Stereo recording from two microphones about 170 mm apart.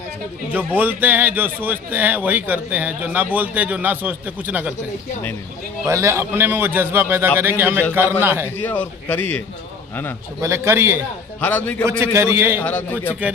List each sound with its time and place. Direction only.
0.5 s a man's voice: 10° right (ahead or behind)
5.8 s a man's voice: 15° right (ahead or behind)
8.6 s a man's voice: 10° left (ahead or behind)
10.4 s a man's voice: 15° right (ahead or behind)
11.3 s a man's voice: 10° left (ahead or behind)
12.1 s a man's voice: 15° right (ahead or behind)
12.6 s a man's voice: 10° left (ahead or behind)